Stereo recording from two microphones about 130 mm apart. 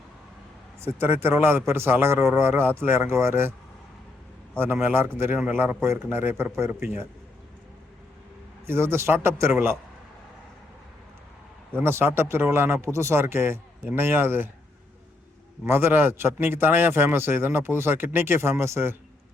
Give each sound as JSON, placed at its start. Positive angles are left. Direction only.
{"t": 0.8, "sound": "a man's voice", "side_deg": -20}
{"t": 4.6, "sound": "a man's voice", "side_deg": -15}
{"t": 8.6, "sound": "speech", "side_deg": -20}
{"t": 11.8, "sound": "a man's voice", "side_deg": -20}
{"t": 15.6, "sound": "a man's voice", "side_deg": -15}